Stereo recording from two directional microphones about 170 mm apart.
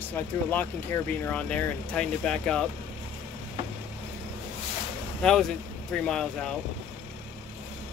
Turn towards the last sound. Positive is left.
turn(degrees=5)  # may be behind; listen again after turning